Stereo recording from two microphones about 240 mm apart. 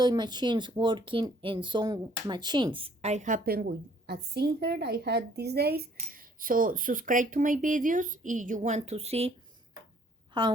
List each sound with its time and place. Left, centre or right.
0.0 s speech: centre
10.3 s a woman's voice: centre